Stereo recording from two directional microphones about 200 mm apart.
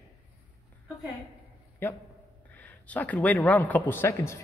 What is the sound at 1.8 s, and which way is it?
Speech, 10° left (ahead or behind).